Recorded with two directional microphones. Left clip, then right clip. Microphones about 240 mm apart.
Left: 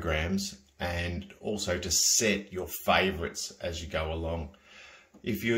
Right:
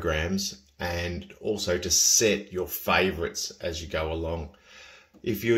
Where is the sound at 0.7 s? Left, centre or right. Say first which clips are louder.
Right 2 dB; right.